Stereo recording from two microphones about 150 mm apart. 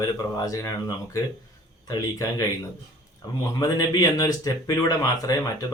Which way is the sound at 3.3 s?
25° left (ahead or behind).